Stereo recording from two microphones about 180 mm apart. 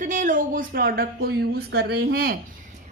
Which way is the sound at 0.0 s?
45° right (ahead or behind).